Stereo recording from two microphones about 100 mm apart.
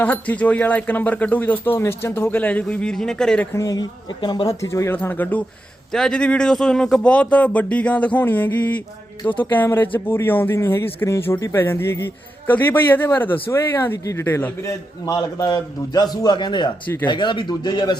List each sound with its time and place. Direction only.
0.0 s speech: 15° left (ahead or behind)
3.5 s speech: 35° left (ahead or behind)
4.4 s speech: 30° left (ahead or behind)
5.9 s speech: 5° left (ahead or behind); by 15.1 s 25° left (ahead or behind)
15.1 s a man's voice: 45° left (ahead or behind)